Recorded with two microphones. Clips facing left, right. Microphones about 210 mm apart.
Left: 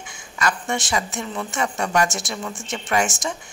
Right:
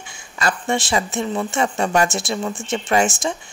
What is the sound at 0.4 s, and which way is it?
Speech, 30° right (ahead or behind).